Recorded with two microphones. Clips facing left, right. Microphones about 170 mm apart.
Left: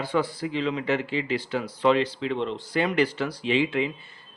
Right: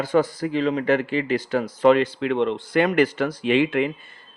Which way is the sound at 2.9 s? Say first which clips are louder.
Right 4 dB; 45° right (ahead or behind).